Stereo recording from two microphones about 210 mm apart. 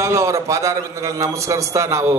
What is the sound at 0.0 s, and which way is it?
A man's voice, 15° right (ahead or behind).